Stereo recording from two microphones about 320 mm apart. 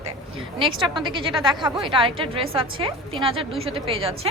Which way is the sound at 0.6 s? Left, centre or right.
Centre.